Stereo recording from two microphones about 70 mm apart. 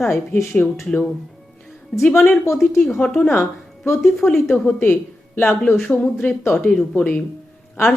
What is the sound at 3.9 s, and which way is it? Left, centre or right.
Speech, centre.